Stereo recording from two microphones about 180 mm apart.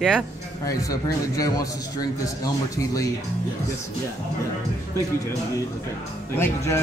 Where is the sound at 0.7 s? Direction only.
20° left (ahead or behind).